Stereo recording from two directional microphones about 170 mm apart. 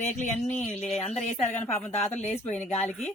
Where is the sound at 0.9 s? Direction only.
40° left (ahead or behind).